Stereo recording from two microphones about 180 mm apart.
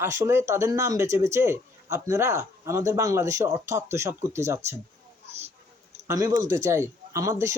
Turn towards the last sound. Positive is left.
turn(degrees=-15)  # may be behind; listen again after turning